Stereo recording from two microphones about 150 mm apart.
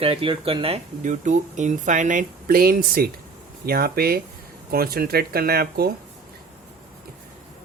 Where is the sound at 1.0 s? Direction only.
55° right (ahead or behind); by 5.9 s 90° right.